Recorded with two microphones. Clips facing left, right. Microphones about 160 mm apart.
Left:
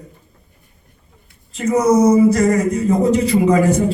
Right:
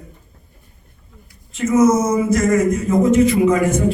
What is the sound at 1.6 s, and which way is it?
Speech, 35° left (ahead or behind).